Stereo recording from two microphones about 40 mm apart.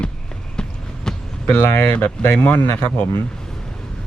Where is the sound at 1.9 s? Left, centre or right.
Left.